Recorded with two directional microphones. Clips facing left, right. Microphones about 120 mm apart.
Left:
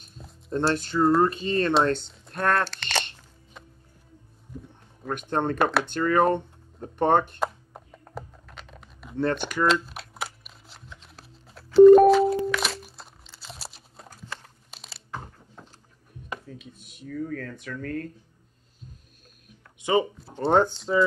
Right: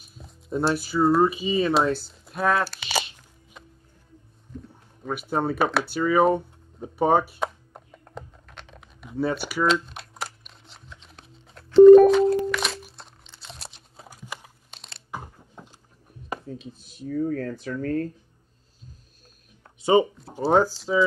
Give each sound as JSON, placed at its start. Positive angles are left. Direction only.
{"t": 0.0, "sound": "speech", "side_deg": -5}
{"t": 4.5, "sound": "a sound", "side_deg": 10}
{"t": 5.0, "sound": "a sound", "side_deg": -5}
{"t": 14.0, "sound": "a sound", "side_deg": -10}
{"t": 14.7, "sound": "crunch", "side_deg": 5}
{"t": 15.0, "sound": "biting", "side_deg": -10}
{"t": 16.3, "sound": "speech", "side_deg": -30}
{"t": 19.8, "sound": "speech", "side_deg": -25}
{"t": 20.2, "sound": "speech", "side_deg": 0}